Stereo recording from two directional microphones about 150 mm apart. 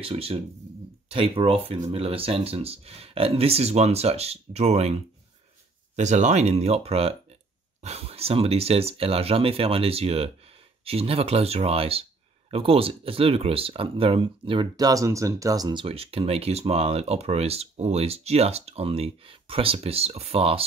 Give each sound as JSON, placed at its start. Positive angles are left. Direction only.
{"t": 0.0, "sound": "speech", "side_deg": -40}
{"t": 5.9, "sound": "speech", "side_deg": -50}